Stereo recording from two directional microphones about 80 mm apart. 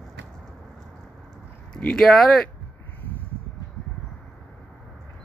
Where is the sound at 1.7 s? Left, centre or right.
Centre.